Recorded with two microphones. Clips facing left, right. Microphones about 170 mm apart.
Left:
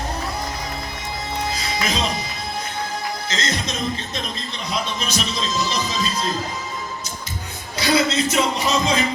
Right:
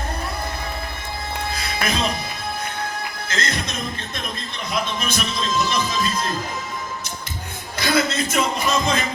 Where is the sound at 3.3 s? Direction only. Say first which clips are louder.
Right 2 dB; 55° right (ahead or behind).